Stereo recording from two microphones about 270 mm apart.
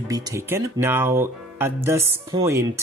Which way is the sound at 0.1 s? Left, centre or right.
Centre.